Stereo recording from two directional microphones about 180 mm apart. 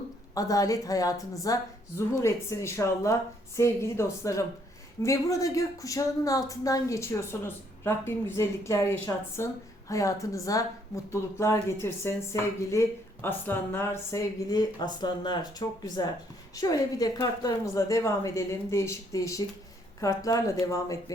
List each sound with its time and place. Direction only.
0.3 s speech: 20° left (ahead or behind)